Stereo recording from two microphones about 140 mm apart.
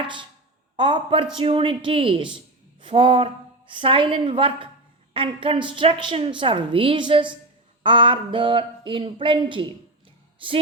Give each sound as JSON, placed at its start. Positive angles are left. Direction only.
{"t": 0.8, "sound": "a woman's voice", "side_deg": -35}